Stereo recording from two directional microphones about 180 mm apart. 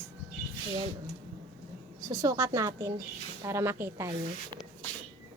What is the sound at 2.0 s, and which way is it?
A woman's voice, 20° right (ahead or behind).